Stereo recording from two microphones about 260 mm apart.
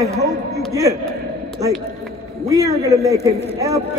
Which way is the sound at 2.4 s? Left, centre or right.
Centre.